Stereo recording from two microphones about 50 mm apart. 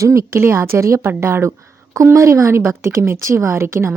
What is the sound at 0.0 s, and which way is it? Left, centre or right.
Speech, right.